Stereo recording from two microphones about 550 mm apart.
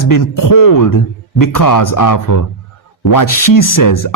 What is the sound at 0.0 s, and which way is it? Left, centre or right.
Speech, left.